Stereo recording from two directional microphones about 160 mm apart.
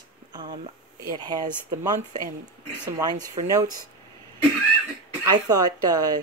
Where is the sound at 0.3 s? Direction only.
30° right (ahead or behind).